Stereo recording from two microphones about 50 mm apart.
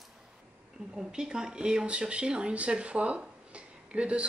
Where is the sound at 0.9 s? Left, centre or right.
Centre.